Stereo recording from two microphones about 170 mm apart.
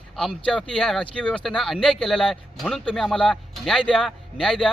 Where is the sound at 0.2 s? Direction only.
5° left (ahead or behind).